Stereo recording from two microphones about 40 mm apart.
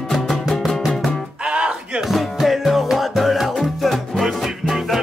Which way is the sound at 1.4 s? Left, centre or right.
Right.